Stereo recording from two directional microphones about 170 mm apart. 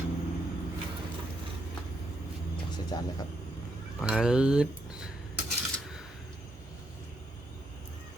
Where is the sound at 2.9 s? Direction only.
25° left (ahead or behind).